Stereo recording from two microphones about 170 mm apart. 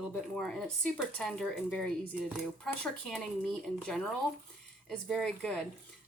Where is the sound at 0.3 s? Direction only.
5° left (ahead or behind).